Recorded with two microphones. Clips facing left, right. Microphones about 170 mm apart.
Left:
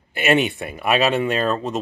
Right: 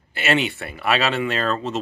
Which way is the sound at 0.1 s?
15° left (ahead or behind).